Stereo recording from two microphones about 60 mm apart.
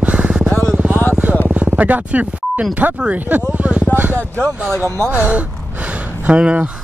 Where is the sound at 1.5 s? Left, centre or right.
Right.